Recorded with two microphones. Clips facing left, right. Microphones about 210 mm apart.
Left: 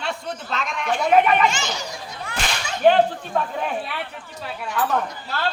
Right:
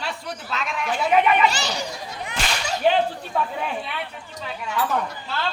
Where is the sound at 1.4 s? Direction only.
35° right (ahead or behind).